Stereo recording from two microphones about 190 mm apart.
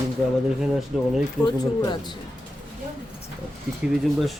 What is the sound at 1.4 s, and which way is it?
Speech, 20° left (ahead or behind).